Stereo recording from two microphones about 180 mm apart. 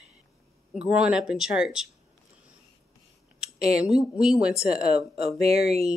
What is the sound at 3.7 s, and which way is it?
Speech, 5° right (ahead or behind).